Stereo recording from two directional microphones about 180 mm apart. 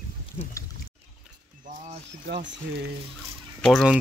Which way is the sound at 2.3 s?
80° right.